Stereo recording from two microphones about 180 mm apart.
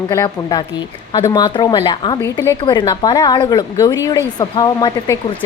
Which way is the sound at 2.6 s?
25° left (ahead or behind).